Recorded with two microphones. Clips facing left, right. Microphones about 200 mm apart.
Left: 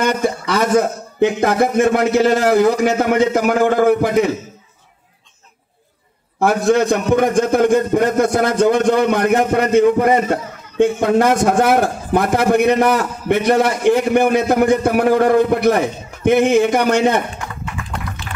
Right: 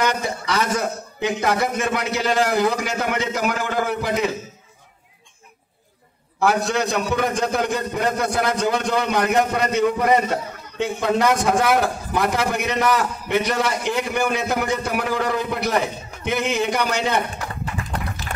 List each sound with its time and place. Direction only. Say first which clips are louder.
0.0 s a man's voice: left 5 dB; 50° left (ahead or behind)
6.4 s a man's voice: left 6 dB; 50° left (ahead or behind)